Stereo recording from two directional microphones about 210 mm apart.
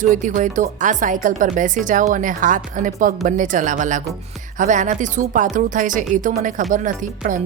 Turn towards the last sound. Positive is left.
turn(degrees=-40)  # may be behind; listen again after turning